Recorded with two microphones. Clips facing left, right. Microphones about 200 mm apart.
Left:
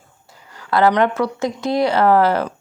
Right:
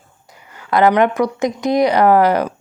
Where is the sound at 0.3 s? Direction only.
15° right (ahead or behind).